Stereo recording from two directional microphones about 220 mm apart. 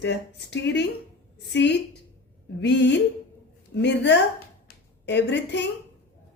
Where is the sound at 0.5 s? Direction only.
50° left (ahead or behind).